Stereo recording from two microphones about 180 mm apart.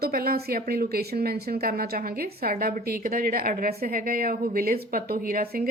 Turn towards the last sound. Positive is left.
turn(degrees=-55)  # may be behind; listen again after turning